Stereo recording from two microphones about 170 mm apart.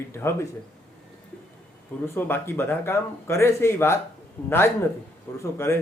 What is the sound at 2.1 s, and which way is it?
A man's voice, 10° left (ahead or behind).